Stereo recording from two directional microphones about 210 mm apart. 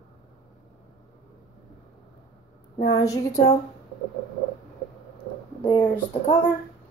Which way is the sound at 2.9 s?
15° left (ahead or behind).